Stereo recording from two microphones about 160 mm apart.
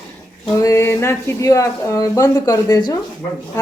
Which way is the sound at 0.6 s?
20° left (ahead or behind).